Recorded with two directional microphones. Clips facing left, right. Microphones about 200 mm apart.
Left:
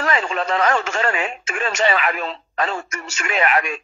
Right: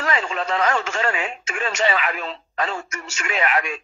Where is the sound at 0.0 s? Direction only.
60° left (ahead or behind).